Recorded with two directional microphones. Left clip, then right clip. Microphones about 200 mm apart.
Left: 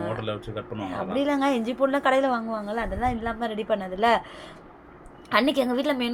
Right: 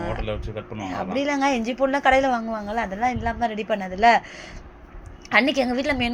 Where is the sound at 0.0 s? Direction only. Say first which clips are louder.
Right 1 dB; centre (ahead or behind).